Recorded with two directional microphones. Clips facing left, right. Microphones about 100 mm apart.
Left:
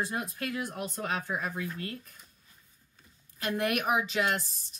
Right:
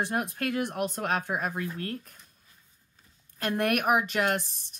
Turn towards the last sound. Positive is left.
turn(degrees=-55)  # may be behind; listen again after turning